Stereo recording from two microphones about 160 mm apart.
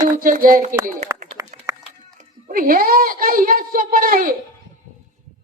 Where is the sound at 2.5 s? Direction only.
65° right (ahead or behind).